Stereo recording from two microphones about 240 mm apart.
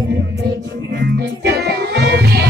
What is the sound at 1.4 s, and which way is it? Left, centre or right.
Music, right.